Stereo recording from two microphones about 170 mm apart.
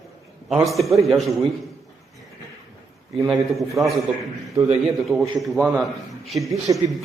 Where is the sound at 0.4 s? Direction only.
Centre (ahead or behind).